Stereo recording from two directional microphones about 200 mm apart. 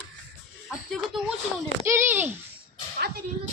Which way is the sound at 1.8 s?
10° right (ahead or behind).